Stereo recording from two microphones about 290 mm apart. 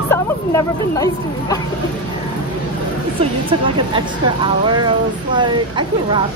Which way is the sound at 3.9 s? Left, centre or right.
Centre.